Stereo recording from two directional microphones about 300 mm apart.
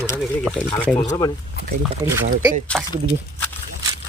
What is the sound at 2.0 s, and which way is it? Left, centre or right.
Speech, centre.